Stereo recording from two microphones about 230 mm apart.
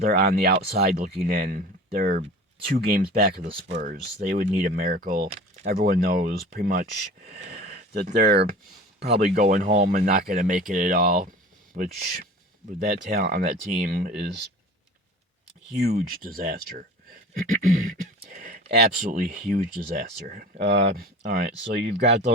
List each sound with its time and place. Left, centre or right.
0.0 s speech: right
15.8 s speech: right
17.4 s a sound: right
19.0 s speech: right